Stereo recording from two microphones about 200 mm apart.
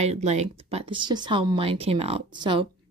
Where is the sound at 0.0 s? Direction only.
35° right (ahead or behind).